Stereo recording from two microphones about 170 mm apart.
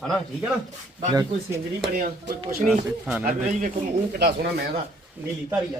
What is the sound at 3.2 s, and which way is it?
Speech, 50° right (ahead or behind).